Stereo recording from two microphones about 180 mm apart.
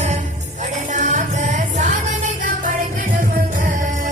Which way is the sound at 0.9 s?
40° right (ahead or behind).